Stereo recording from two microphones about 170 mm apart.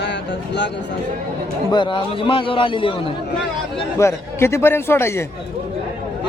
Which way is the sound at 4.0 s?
15° left (ahead or behind).